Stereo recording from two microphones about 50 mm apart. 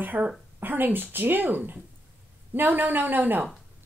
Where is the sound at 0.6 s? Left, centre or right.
Right.